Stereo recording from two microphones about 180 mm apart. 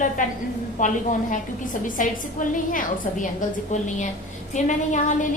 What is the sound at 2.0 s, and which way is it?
A woman's voice, 45° left (ahead or behind).